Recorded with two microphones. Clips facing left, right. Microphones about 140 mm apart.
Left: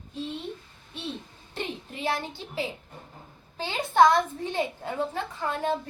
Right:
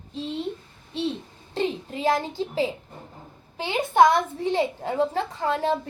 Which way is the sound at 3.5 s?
20° right (ahead or behind).